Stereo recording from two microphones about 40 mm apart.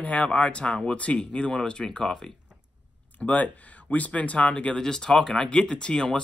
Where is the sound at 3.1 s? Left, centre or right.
Left.